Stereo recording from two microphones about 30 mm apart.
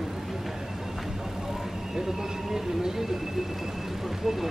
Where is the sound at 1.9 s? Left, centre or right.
Centre.